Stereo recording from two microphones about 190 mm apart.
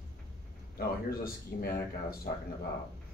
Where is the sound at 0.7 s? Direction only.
50° left (ahead or behind).